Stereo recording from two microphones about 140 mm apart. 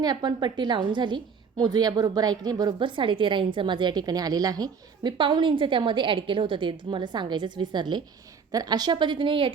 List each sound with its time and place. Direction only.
0.0 s a woman's voice: 30° right (ahead or behind)